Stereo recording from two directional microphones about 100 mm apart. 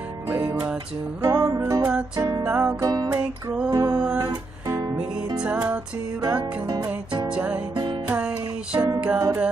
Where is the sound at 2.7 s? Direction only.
40° right (ahead or behind).